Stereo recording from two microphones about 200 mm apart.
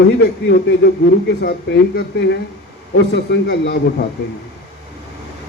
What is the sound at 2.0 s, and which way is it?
Speech, 60° left (ahead or behind).